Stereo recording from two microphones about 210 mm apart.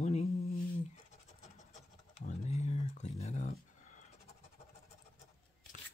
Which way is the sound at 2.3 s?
30° left (ahead or behind).